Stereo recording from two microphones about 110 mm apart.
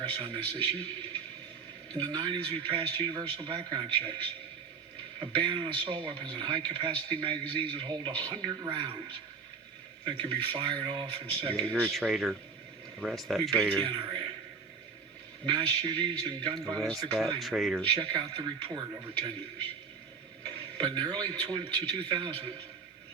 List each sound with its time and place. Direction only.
0.1 s speech: 45° right (ahead or behind)
1.9 s speech: 45° right (ahead or behind)
5.2 s speech: 45° right (ahead or behind)
11.5 s speech: 10° left (ahead or behind)
11.9 s speech: centre (ahead or behind)
13.8 s a man's voice: 45° right (ahead or behind)
15.4 s speech: 45° right (ahead or behind)
16.7 s speech: 5° left (ahead or behind)
17.8 s speech: 45° right (ahead or behind)
20.4 s speech: 45° right (ahead or behind)